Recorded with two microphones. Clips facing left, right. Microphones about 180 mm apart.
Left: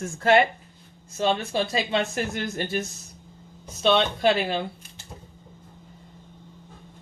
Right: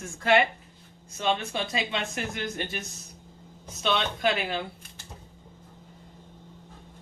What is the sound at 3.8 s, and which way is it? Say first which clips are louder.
Speech: left 6 dB; 30° left (ahead or behind).